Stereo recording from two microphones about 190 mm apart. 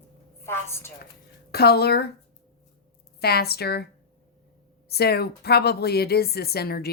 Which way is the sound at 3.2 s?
55° left (ahead or behind).